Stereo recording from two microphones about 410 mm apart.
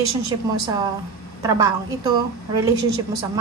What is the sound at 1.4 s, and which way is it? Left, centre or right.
A woman's voice, centre.